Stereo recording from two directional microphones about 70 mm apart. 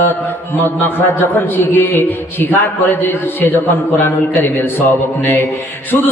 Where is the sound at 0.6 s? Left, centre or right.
Left.